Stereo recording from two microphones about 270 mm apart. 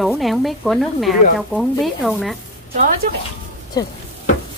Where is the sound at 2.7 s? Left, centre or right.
Right.